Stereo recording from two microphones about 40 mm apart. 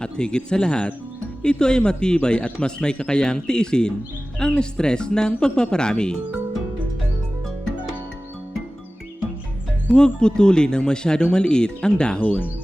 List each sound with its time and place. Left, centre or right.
0.0 s speech: left
9.9 s speech: left